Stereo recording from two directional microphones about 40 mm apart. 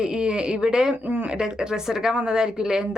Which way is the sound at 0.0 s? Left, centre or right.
Right.